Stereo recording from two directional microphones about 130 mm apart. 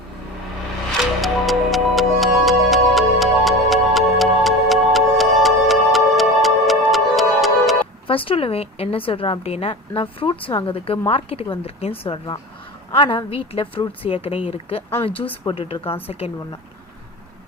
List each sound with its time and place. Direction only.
1.2 s music: centre (ahead or behind)
8.0 s a woman's voice: 45° left (ahead or behind)